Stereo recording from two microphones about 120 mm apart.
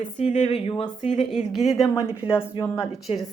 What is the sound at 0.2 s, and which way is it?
Speech, 65° left (ahead or behind).